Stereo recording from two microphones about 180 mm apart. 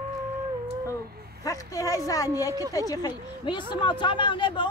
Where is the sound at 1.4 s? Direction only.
20° left (ahead or behind).